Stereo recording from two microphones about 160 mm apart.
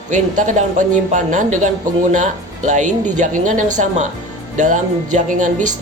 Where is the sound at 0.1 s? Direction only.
50° right (ahead or behind).